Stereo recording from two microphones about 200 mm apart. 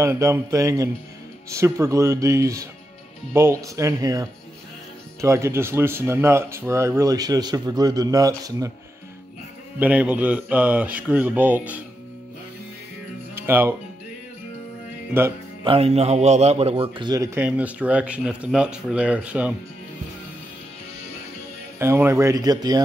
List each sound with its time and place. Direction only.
0.0 s a man's voice: 15° right (ahead or behind)
9.8 s a man's voice: 5° right (ahead or behind)
13.3 s music: 10° right (ahead or behind)
15.6 s a man's voice: 30° right (ahead or behind); by 19.5 s 5° right (ahead or behind)
21.7 s a man's voice: 10° right (ahead or behind)